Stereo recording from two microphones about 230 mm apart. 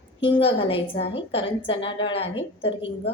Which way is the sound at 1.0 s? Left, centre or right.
Left.